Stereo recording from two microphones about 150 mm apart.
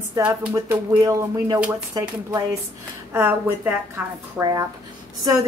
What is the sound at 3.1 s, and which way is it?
A woman's voice, 15° right (ahead or behind).